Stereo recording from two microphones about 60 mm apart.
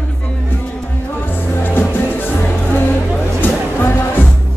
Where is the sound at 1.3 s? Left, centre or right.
Left.